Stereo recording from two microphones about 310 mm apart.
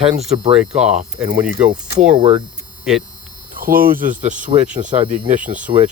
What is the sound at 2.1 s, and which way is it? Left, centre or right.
Speech, centre.